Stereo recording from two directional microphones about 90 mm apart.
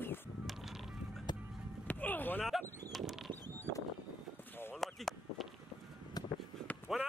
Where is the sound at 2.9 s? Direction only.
5° right (ahead or behind).